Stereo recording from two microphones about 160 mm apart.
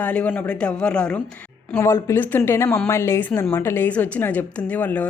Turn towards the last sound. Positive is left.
turn(degrees=10)  # may be behind; listen again after turning